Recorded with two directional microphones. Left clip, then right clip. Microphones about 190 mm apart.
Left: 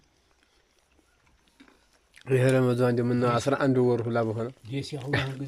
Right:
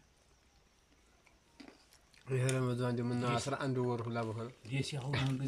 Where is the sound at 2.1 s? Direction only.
50° left (ahead or behind).